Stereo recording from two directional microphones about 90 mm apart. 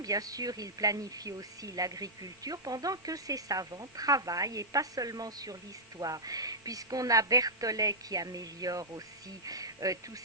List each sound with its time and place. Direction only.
0.0 s a woman's voice: 40° right (ahead or behind)